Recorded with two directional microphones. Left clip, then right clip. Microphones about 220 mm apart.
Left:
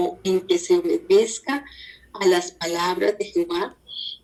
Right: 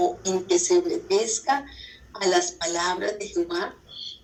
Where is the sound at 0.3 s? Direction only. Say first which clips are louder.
Left 2 dB; 40° left (ahead or behind).